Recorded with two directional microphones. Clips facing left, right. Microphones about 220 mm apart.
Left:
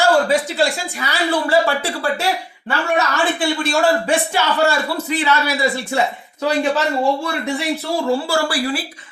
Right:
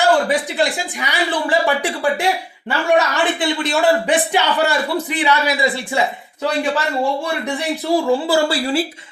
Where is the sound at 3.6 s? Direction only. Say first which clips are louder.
Right 1 dB; 20° right (ahead or behind).